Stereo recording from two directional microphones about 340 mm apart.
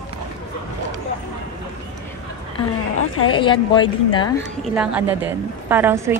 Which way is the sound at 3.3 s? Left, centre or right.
Centre.